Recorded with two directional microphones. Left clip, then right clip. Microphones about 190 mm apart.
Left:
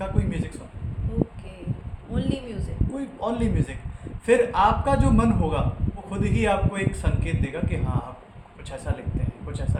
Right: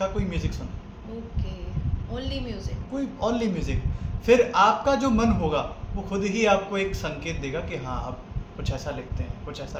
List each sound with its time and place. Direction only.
0.0 s a man's voice: 15° right (ahead or behind)
2.1 s speech: 20° left (ahead or behind)
3.2 s a man's voice: 15° right (ahead or behind)